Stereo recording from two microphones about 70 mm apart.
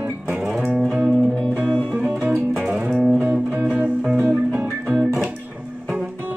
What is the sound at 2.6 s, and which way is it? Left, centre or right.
Music, centre.